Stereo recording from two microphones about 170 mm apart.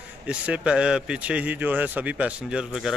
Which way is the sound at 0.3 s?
5° right (ahead or behind).